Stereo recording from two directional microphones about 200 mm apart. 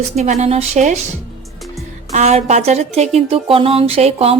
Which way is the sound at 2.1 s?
35° right (ahead or behind).